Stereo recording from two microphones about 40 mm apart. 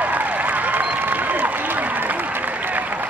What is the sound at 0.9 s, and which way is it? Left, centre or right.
Applause, right.